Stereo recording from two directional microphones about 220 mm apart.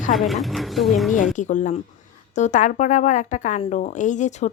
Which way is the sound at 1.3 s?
35° left (ahead or behind).